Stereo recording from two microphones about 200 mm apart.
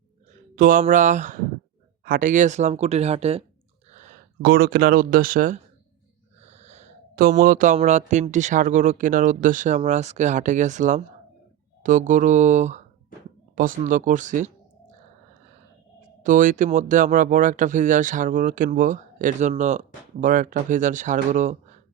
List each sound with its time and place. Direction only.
0.5 s speech: 45° right (ahead or behind)
3.8 s a sound: 35° right (ahead or behind)
4.4 s speech: 50° right (ahead or behind)
6.4 s speech: 35° right (ahead or behind)
16.0 s speech: 40° right (ahead or behind)